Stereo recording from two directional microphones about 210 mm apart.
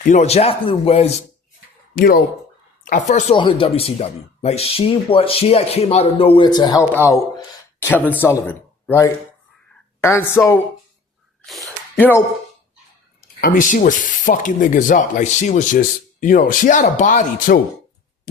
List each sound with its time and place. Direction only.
0.1 s speech: 30° left (ahead or behind)
2.0 s speech: 45° left (ahead or behind)
3.3 s a man's voice: 25° left (ahead or behind)
11.4 s a sound: centre (ahead or behind)
13.4 s speech: 40° left (ahead or behind)